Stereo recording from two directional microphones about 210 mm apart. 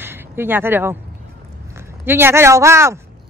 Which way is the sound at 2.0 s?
10° right (ahead or behind).